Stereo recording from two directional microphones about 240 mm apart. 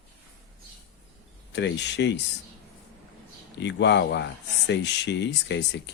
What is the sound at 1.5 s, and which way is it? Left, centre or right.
Speech, left.